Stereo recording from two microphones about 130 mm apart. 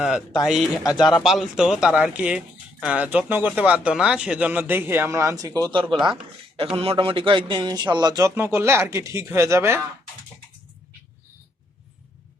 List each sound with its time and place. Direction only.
0.4 s speech: 5° right (ahead or behind)
0.9 s speech: 35° left (ahead or behind)
1.2 s a man's voice: 5° right (ahead or behind); by 6.1 s 35° right (ahead or behind)
6.7 s a man's voice: 45° right (ahead or behind); by 8.3 s 30° right (ahead or behind)
8.4 s speech: 20° right (ahead or behind)